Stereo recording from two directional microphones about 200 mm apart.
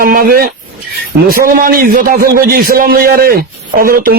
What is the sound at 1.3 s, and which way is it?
A man's voice, 45° right (ahead or behind).